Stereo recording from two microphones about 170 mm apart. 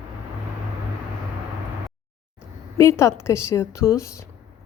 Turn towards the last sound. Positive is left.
turn(degrees=15)  # may be behind; listen again after turning